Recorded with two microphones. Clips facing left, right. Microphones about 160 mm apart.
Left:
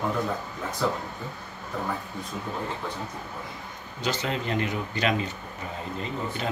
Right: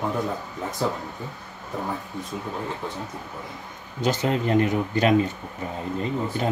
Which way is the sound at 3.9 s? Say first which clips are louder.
Right 6 dB; 45° right (ahead or behind).